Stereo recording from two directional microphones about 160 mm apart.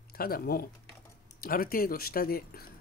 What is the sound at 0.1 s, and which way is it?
Speech, 70° left (ahead or behind).